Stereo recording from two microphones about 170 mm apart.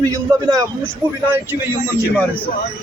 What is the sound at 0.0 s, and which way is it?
Speech, 20° right (ahead or behind).